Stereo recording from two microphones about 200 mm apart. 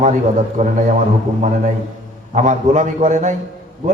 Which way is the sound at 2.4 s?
35° right (ahead or behind).